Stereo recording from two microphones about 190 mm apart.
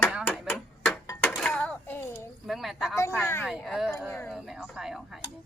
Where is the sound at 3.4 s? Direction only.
Centre (ahead or behind).